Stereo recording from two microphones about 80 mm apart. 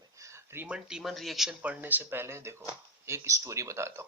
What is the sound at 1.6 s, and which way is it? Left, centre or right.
Speech, right.